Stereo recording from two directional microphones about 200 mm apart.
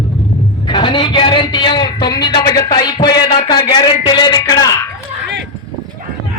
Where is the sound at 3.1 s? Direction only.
20° left (ahead or behind).